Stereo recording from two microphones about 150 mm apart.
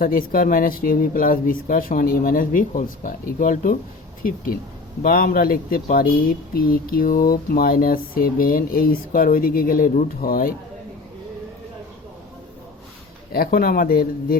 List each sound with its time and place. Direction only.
0.0 s speech: 70° left (ahead or behind)
13.3 s speech: 75° left (ahead or behind)